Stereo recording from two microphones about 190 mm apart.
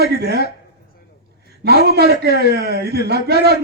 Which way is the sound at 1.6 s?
55° right (ahead or behind).